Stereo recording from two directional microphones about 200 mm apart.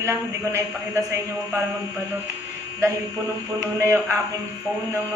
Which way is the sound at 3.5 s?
15° right (ahead or behind).